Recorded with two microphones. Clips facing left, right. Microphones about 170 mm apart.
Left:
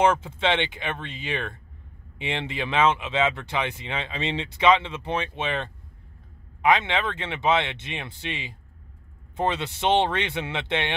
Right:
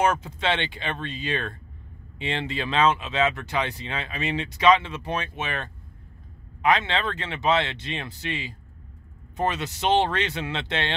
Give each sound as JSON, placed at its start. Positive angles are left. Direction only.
{"t": 0.1, "sound": "speech", "side_deg": 25}